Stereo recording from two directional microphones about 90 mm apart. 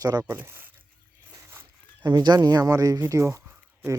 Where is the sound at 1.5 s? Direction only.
25° right (ahead or behind).